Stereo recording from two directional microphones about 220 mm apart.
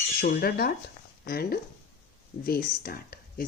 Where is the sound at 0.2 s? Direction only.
45° left (ahead or behind).